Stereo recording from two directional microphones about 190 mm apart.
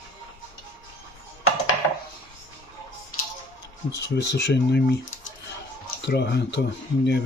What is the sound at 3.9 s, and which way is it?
Speech, 65° left (ahead or behind).